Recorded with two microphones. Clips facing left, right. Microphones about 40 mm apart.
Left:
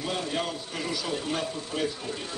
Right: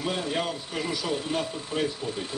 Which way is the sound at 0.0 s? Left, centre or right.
Centre.